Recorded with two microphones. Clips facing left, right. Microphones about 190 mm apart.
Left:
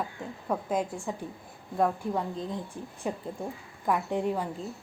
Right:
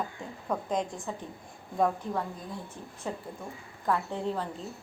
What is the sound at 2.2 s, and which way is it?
A woman's voice, 20° left (ahead or behind).